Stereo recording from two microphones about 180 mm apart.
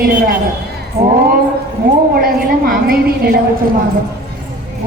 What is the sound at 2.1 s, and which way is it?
A woman's voice, 55° right (ahead or behind).